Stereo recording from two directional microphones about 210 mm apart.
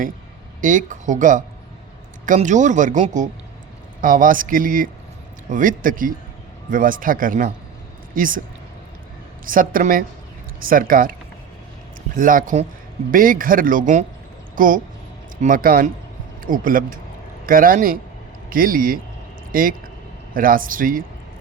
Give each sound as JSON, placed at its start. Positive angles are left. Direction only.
{"t": 0.6, "sound": "speech", "side_deg": -40}
{"t": 9.5, "sound": "speech", "side_deg": -40}
{"t": 12.1, "sound": "speech", "side_deg": -40}